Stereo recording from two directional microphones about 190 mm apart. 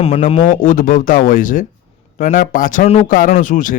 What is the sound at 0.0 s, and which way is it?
A man's voice, 30° left (ahead or behind).